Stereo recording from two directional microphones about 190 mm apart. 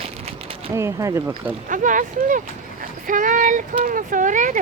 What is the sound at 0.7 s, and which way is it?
Speech, 15° right (ahead or behind).